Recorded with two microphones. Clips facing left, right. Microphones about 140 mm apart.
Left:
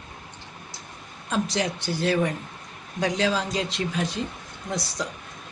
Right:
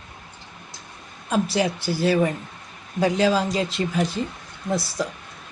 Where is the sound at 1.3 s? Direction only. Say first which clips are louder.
Right 4 dB; 5° right (ahead or behind).